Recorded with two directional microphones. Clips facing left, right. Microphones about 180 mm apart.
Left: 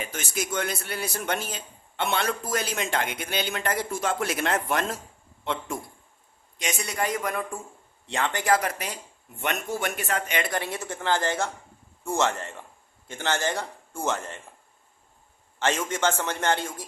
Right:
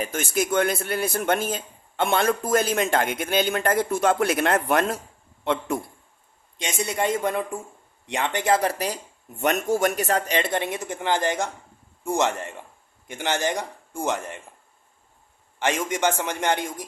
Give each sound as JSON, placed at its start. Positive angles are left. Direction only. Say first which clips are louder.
{"t": 0.0, "sound": "a man's voice", "louder": "right 7 dB", "side_deg": -50}
{"t": 6.6, "sound": "a man's voice", "louder": "right 4 dB", "side_deg": -25}
{"t": 15.5, "sound": "a man's voice", "louder": "right 2 dB", "side_deg": -15}